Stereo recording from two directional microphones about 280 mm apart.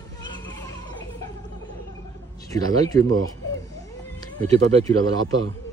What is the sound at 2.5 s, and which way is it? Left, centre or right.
Speech, centre.